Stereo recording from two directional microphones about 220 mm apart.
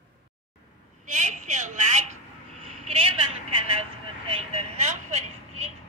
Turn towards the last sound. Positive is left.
turn(degrees=-30)  # may be behind; listen again after turning